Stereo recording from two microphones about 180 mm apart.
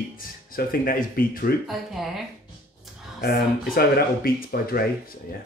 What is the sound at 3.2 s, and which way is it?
Speech, 60° left (ahead or behind).